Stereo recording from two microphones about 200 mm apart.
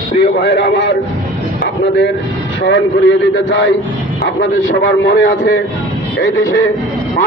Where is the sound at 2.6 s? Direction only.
65° left (ahead or behind).